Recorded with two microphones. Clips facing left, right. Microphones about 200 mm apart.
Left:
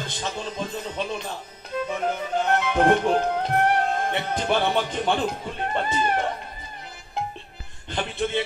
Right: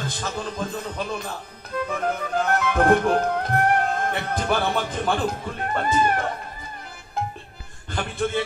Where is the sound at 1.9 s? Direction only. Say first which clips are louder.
Right 1 dB; 25° left (ahead or behind).